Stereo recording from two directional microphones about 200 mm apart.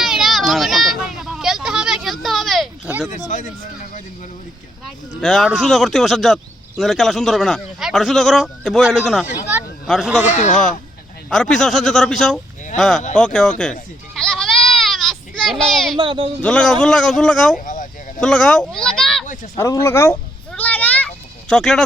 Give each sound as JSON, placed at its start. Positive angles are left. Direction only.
{"t": 0.0, "sound": "a sound", "side_deg": 0}
{"t": 3.2, "sound": "speech", "side_deg": 40}
{"t": 5.2, "sound": "speech", "side_deg": 0}
{"t": 10.3, "sound": "speech", "side_deg": 35}
{"t": 11.3, "sound": "speech", "side_deg": 5}
{"t": 14.2, "sound": "sheep", "side_deg": 0}
{"t": 16.0, "sound": "speech", "side_deg": -25}
{"t": 16.4, "sound": "speech", "side_deg": 5}
{"t": 17.6, "sound": "a sound", "side_deg": 40}
{"t": 18.2, "sound": "speech", "side_deg": 5}
{"t": 19.5, "sound": "speech", "side_deg": 15}
{"t": 20.5, "sound": "a sound", "side_deg": 10}